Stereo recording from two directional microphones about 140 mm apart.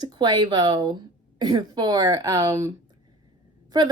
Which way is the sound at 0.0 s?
30° right (ahead or behind).